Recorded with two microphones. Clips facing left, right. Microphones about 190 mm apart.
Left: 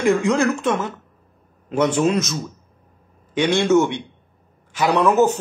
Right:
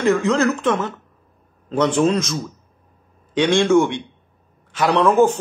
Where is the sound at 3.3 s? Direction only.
5° left (ahead or behind).